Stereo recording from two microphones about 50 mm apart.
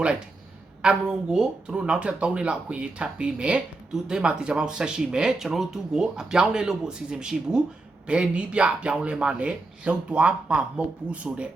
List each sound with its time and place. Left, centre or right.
0.8 s speech: centre